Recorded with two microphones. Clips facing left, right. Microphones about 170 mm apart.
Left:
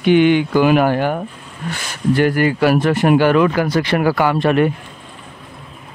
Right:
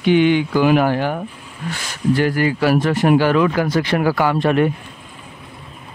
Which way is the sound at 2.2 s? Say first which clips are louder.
Left 4 dB; 60° left (ahead or behind).